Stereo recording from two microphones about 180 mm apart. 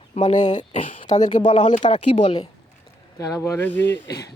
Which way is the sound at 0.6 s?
30° left (ahead or behind).